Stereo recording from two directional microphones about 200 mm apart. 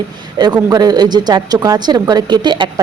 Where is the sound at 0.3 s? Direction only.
20° right (ahead or behind).